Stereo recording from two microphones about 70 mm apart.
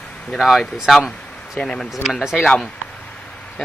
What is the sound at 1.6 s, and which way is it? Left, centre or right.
Speech, centre.